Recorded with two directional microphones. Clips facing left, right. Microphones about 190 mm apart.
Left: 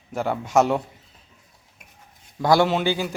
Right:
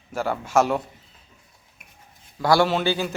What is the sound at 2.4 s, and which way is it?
Speech, 20° left (ahead or behind).